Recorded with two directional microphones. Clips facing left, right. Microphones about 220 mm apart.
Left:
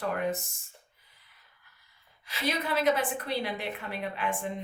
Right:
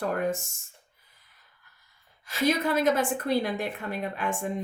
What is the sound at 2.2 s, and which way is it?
Speech, 45° right (ahead or behind).